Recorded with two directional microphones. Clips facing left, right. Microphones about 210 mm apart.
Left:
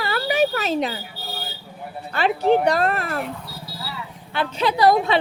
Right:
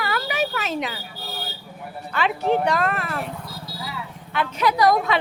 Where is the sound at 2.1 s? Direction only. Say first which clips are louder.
Left 3 dB; 35° left (ahead or behind).